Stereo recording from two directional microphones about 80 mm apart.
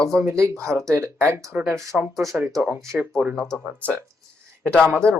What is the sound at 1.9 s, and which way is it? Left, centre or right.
Speech, centre.